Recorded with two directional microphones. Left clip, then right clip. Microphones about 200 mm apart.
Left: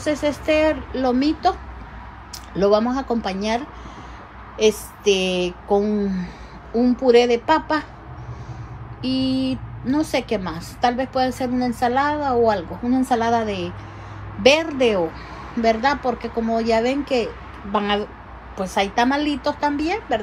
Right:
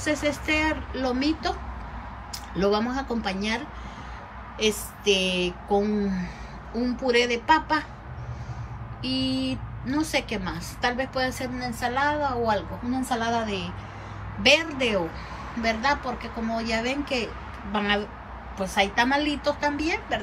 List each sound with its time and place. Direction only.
0.0 s a woman's voice: 15° left (ahead or behind)
9.0 s a woman's voice: 20° left (ahead or behind)